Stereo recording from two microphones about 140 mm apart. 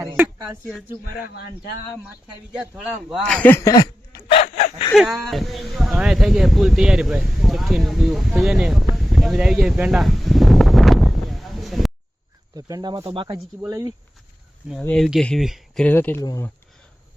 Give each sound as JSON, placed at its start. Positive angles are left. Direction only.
{"t": 0.0, "sound": "speech", "side_deg": -20}
{"t": 2.7, "sound": "speech", "side_deg": -5}
{"t": 3.5, "sound": "speech", "side_deg": 25}
{"t": 4.9, "sound": "speech", "side_deg": 0}
{"t": 12.5, "sound": "speech", "side_deg": -25}
{"t": 13.7, "sound": "speech", "side_deg": -20}
{"t": 14.8, "sound": "speech", "side_deg": 5}
{"t": 15.9, "sound": "speech", "side_deg": 15}